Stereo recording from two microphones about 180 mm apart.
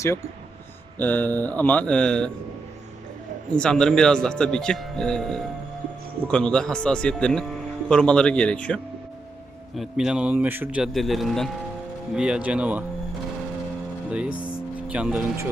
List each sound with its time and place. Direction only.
0.9 s speech: 10° left (ahead or behind)
3.5 s speech: 5° left (ahead or behind)
14.1 s speech: 5° right (ahead or behind)